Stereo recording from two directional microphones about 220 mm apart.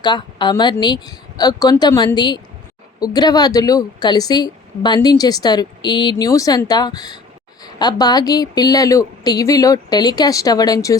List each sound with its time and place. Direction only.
0.0 s a woman's voice: 20° left (ahead or behind)